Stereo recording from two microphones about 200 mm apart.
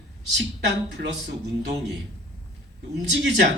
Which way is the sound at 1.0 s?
50° right (ahead or behind).